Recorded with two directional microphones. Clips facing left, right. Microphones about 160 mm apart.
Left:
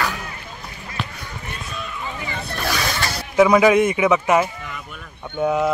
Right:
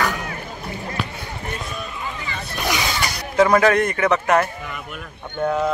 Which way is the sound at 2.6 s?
20° right (ahead or behind).